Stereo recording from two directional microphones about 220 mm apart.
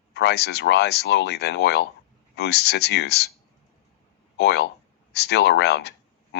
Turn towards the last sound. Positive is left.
turn(degrees=50)  # may be behind; listen again after turning